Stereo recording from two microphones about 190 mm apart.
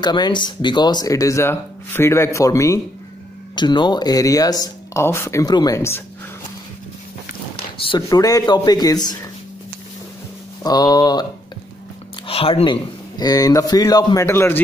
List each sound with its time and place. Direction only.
0.0 s speech: 25° left (ahead or behind)
7.8 s speech: 20° left (ahead or behind)
10.6 s speech: 20° left (ahead or behind)
12.3 s speech: 30° left (ahead or behind); by 14.6 s 15° left (ahead or behind)